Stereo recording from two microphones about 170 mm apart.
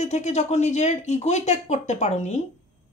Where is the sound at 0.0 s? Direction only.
40° left (ahead or behind).